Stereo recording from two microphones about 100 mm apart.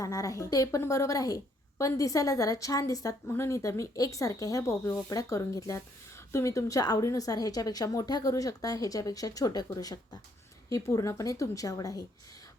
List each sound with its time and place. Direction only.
0.0 s speech: 35° left (ahead or behind)